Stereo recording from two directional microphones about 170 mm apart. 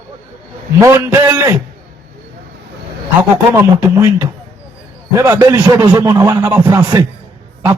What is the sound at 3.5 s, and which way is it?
Chopping, 15° right (ahead or behind).